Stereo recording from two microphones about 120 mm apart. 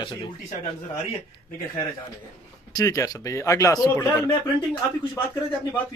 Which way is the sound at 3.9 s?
20° left (ahead or behind).